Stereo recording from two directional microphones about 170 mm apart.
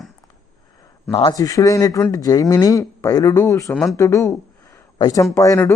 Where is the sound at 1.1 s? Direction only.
25° left (ahead or behind).